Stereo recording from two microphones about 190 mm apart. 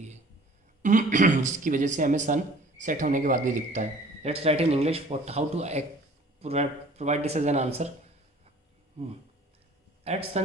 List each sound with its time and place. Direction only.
0.8 s speech: 40° right (ahead or behind)
10.0 s a man's voice: 35° right (ahead or behind)